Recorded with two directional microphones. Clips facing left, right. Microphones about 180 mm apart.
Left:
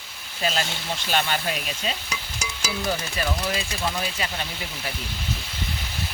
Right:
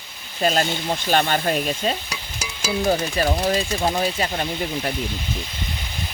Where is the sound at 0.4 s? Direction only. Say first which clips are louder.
Right 6 dB; 50° right (ahead or behind).